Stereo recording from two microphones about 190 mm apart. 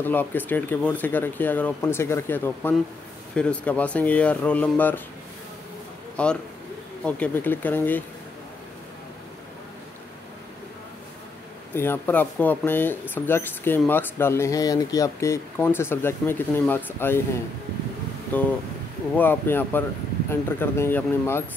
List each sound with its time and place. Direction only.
0.0 s speech: 10° left (ahead or behind)
6.2 s a man's voice: 5° left (ahead or behind)
11.7 s speech: 10° left (ahead or behind)
18.3 s speech: 10° left (ahead or behind)